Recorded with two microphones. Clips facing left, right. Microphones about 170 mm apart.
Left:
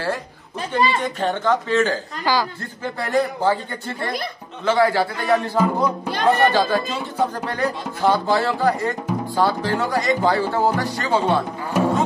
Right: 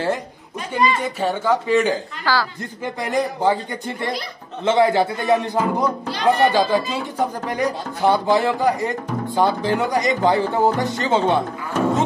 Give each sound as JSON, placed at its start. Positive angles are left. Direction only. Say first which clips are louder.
{"t": 0.6, "sound": "a woman's voice", "louder": "even", "side_deg": 30}
{"t": 1.0, "sound": "speech", "louder": "even", "side_deg": -10}
{"t": 2.3, "sound": "a woman's voice", "louder": "left 1 dB", "side_deg": 15}
{"t": 2.8, "sound": "speech", "louder": "left 1 dB", "side_deg": -15}
{"t": 11.7, "sound": "music", "louder": "left 1 dB", "side_deg": 10}